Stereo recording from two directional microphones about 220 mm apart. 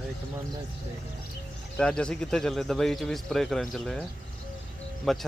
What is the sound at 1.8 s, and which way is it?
A man's voice, 5° left (ahead or behind).